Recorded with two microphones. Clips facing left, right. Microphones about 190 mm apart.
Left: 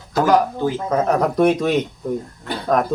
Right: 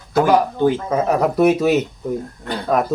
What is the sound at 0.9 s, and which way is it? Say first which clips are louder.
Speech: even; 5° right (ahead or behind).